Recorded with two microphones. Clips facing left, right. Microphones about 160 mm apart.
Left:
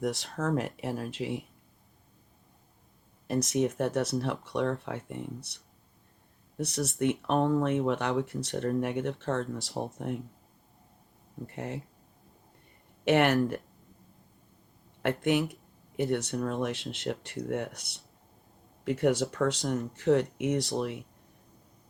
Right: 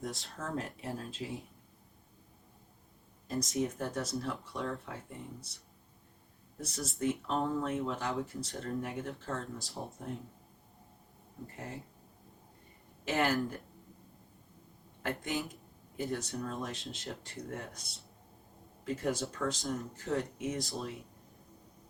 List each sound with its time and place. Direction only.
0.0 s speech: 80° left
3.2 s speech: 75° left (ahead or behind)
11.5 s speech: 70° left (ahead or behind)
13.1 s speech: 70° left (ahead or behind)
15.0 s speech: 70° left (ahead or behind)